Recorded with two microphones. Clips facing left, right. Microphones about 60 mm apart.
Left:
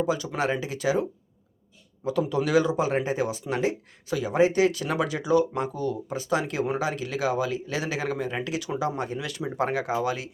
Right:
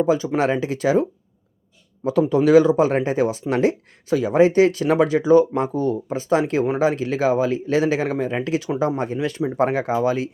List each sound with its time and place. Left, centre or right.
0.0 s speech: right
2.0 s speech: right